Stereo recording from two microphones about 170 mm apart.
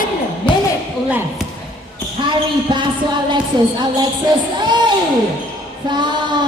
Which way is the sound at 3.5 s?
25° right (ahead or behind).